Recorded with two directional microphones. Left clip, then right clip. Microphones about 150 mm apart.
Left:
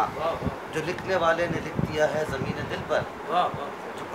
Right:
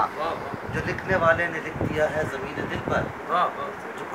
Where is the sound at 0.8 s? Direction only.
65° left (ahead or behind).